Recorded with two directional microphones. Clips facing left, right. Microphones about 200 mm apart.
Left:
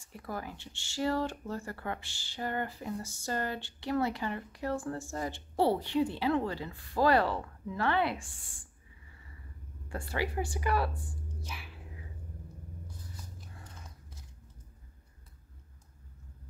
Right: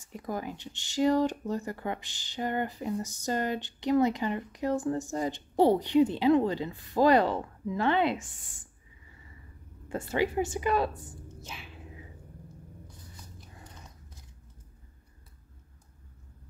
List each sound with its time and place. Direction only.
0.0 s speech: 20° right (ahead or behind)
9.8 s a woman's voice: 20° right (ahead or behind)